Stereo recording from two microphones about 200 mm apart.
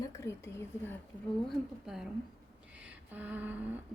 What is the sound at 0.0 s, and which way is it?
Speech, 15° left (ahead or behind).